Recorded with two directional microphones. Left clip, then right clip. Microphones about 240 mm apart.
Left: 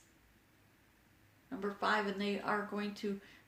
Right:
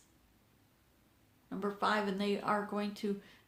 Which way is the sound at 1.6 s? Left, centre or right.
Right.